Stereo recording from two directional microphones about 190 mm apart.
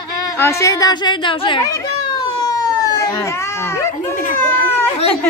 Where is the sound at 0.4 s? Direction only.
15° left (ahead or behind).